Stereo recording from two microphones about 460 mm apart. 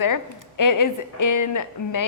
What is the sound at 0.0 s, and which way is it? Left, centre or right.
Speech, left.